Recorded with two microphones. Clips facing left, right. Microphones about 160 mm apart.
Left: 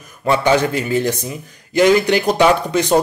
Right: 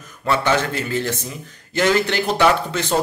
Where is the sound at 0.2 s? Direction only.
15° left (ahead or behind).